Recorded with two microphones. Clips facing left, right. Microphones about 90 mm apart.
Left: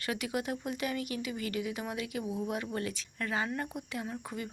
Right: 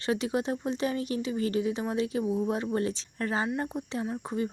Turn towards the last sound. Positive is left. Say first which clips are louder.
# right 8 dB
turn(degrees=-30)  # may be behind; listen again after turning